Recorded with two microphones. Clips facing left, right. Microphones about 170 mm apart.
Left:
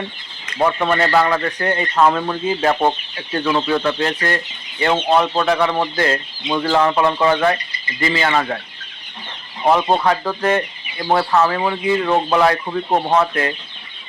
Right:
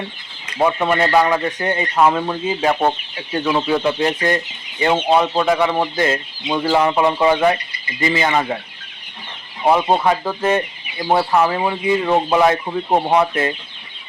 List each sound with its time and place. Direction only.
0.6 s speech: 10° right (ahead or behind)
9.6 s speech: 10° right (ahead or behind)